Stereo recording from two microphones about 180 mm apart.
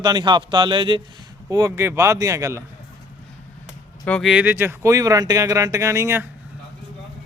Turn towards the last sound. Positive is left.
turn(degrees=-15)  # may be behind; listen again after turning